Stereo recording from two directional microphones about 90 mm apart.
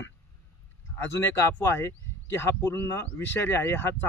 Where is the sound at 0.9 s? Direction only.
25° left (ahead or behind).